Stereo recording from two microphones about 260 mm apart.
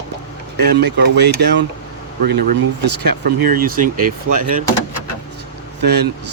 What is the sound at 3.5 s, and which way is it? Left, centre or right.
Speech, right.